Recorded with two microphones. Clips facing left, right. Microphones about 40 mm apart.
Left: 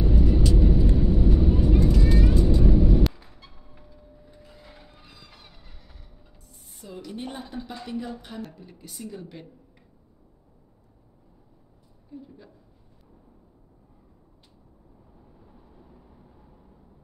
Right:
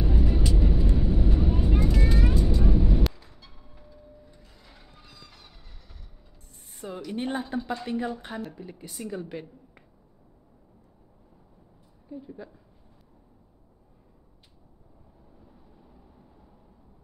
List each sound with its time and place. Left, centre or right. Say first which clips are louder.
0.0 s vehicle: left 3 dB; centre
2.3 s vehicle: left 4 dB; centre
3.1 s music: left 2 dB; centre
3.8 s a sound: right 3 dB; centre
6.8 s a sound: right 4 dB; right
7.8 s speech: right 3 dB; right
8.5 s speech: right 4 dB; centre